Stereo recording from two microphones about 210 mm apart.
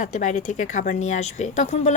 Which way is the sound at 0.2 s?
35° left (ahead or behind).